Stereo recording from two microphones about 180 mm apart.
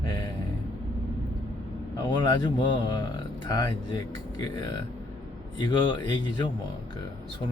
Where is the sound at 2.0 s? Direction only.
25° left (ahead or behind).